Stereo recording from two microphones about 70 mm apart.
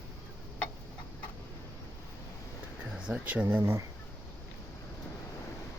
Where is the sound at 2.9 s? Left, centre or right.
Centre.